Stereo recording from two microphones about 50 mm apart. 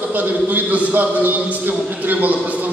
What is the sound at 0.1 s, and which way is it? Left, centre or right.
A man's voice, right.